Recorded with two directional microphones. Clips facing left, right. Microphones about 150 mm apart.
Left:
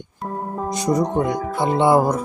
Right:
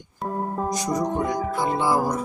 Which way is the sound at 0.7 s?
25° left (ahead or behind).